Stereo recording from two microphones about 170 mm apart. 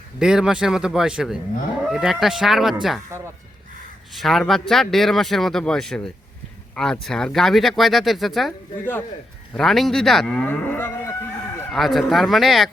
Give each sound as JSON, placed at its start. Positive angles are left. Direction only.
{"t": 0.2, "sound": "speech", "side_deg": -5}
{"t": 3.1, "sound": "speech", "side_deg": -15}
{"t": 4.1, "sound": "speech", "side_deg": 0}
{"t": 9.6, "sound": "moo", "side_deg": 0}
{"t": 11.7, "sound": "speech", "side_deg": 0}